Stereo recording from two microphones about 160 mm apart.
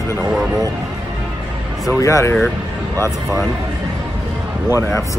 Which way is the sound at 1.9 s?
20° left (ahead or behind).